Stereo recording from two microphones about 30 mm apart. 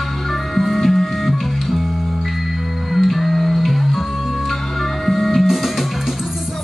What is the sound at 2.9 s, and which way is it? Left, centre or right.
Music, centre.